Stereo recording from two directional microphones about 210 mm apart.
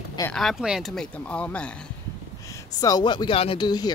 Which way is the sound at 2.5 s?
15° left (ahead or behind).